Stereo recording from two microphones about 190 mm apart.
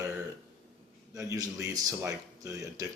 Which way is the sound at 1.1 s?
15° right (ahead or behind).